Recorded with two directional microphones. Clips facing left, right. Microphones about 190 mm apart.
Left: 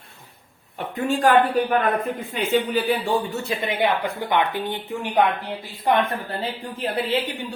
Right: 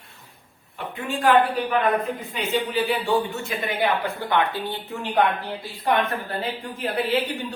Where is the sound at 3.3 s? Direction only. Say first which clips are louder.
Left 2 dB; 35° left (ahead or behind).